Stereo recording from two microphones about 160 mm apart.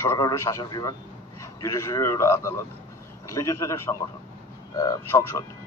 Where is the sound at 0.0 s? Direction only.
20° left (ahead or behind).